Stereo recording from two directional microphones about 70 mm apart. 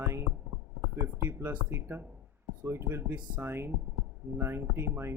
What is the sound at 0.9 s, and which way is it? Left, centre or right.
Speech, right.